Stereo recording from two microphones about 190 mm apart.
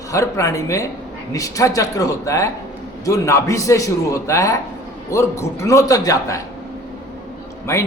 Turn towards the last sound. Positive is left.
turn(degrees=15)  # may be behind; listen again after turning